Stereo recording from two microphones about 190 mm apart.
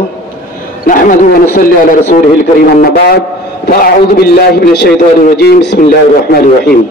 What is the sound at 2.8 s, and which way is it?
A man's voice, 55° left (ahead or behind).